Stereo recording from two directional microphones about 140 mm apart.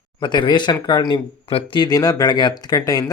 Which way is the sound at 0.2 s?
35° left (ahead or behind).